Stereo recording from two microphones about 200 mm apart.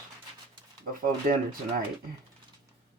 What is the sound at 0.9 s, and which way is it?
Speech, 45° right (ahead or behind).